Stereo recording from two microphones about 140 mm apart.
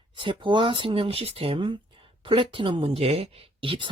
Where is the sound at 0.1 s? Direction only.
35° right (ahead or behind).